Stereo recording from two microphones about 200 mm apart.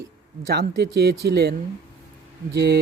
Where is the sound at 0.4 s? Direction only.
55° right (ahead or behind).